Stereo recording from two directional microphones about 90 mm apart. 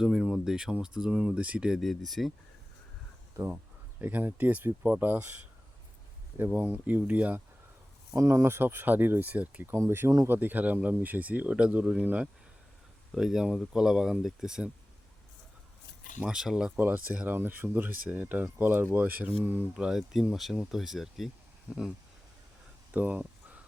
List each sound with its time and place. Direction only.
0.0 s speech: 5° right (ahead or behind)
1.8 s speech: centre (ahead or behind)
4.0 s speech: 20° right (ahead or behind)
6.5 s speech: 20° right (ahead or behind)
8.1 s speech: 30° right (ahead or behind); by 9.6 s 15° right (ahead or behind)
9.6 s speech: 25° right (ahead or behind)
13.1 s speech: 5° right (ahead or behind)
16.2 s speech: 5° right (ahead or behind)
16.7 s speech: 20° right (ahead or behind)
19.7 s speech: 5° right (ahead or behind)
22.9 s a sound: 15° right (ahead or behind)